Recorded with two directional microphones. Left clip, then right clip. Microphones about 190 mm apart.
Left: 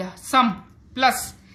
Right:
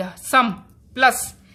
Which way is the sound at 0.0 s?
40° right (ahead or behind).